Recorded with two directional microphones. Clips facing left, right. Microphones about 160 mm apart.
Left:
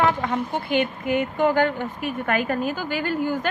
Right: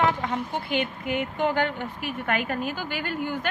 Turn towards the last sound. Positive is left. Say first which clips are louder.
# left 5 dB
turn(degrees=40)  # may be behind; listen again after turning